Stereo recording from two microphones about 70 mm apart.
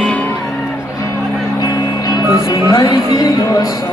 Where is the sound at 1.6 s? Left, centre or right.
Left.